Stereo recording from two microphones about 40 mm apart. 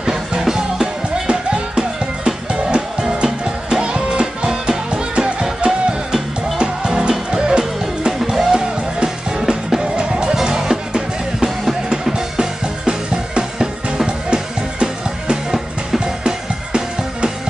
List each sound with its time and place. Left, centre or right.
0.0 s music: centre
8.2 s music: centre
8.5 s music: centre
11.3 s music: centre
11.9 s music: centre
15.5 s music: centre